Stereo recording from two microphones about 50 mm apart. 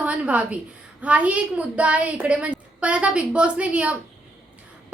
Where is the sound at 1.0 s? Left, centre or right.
Right.